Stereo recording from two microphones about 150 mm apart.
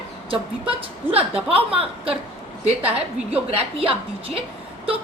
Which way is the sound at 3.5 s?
40° right (ahead or behind).